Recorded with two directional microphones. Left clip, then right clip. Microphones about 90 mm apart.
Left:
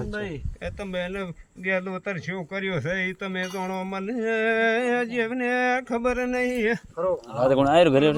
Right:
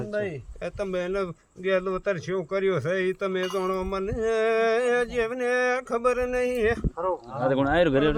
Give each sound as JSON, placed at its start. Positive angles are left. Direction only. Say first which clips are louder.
{"t": 0.6, "sound": "speech", "louder": "right 2 dB", "side_deg": -25}
{"t": 6.9, "sound": "speech", "louder": "left 2 dB", "side_deg": 10}
{"t": 7.3, "sound": "speech", "louder": "left 5 dB", "side_deg": 30}